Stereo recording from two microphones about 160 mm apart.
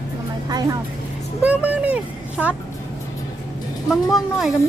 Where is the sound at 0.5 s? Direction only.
25° right (ahead or behind).